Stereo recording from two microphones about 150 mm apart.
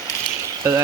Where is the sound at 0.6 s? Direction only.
20° right (ahead or behind).